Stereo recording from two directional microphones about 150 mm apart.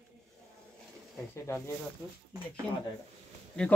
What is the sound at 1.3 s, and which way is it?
Speech, 20° left (ahead or behind).